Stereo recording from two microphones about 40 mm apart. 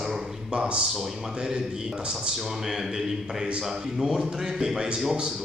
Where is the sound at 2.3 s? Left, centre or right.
Centre.